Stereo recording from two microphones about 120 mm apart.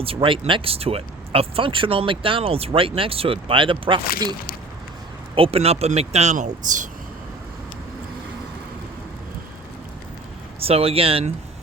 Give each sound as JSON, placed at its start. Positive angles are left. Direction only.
{"t": 0.0, "sound": "speech", "side_deg": -50}
{"t": 5.3, "sound": "speech", "side_deg": -50}
{"t": 10.6, "sound": "speech", "side_deg": -55}